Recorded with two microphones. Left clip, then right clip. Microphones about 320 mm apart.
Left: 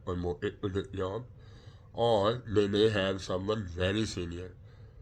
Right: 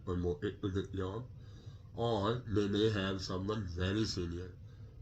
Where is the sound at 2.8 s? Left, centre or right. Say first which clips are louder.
Left 7 dB; left.